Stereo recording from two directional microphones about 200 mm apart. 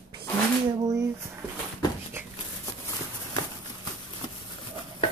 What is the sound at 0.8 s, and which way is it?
Speech, 15° right (ahead or behind).